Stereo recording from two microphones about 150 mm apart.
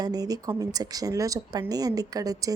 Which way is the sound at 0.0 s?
25° right (ahead or behind).